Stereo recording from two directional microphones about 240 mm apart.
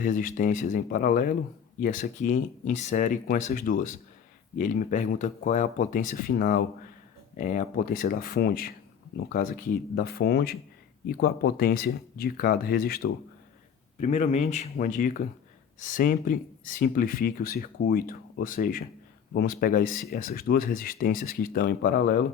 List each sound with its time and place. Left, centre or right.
0.0 s speech: left
14.0 s speech: left